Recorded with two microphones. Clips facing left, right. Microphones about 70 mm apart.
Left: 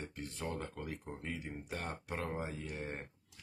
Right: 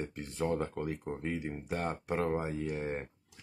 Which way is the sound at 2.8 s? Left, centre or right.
Centre.